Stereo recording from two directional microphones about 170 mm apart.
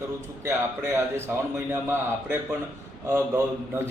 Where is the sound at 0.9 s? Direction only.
15° right (ahead or behind).